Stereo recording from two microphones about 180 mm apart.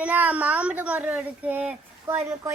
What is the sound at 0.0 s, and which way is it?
Speech, 10° right (ahead or behind).